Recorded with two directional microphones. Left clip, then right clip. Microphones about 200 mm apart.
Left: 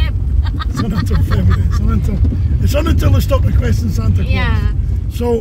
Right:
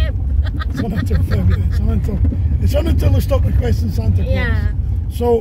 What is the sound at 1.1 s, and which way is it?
Speech, 25° left (ahead or behind).